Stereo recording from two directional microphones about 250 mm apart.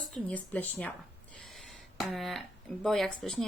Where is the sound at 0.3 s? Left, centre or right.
Centre.